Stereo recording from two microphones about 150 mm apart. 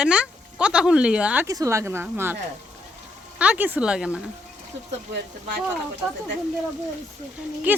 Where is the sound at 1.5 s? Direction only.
20° right (ahead or behind).